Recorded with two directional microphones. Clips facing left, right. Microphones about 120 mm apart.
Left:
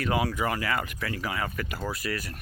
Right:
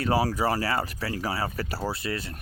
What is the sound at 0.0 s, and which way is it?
Speech, 35° right (ahead or behind).